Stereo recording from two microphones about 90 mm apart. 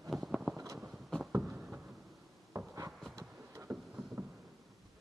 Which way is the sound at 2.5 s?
35° right (ahead or behind).